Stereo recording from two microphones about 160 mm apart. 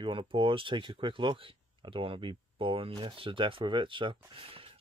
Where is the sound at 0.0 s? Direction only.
30° right (ahead or behind).